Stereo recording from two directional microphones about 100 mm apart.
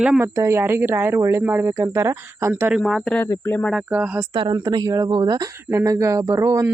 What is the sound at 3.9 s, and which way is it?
Speech, 15° right (ahead or behind).